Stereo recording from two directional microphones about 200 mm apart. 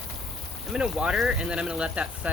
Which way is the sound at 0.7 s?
Centre (ahead or behind).